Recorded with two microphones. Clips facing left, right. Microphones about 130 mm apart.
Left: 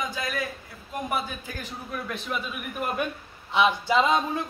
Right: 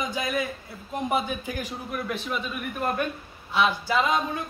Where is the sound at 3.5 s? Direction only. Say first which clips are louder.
Left 2 dB; 20° left (ahead or behind).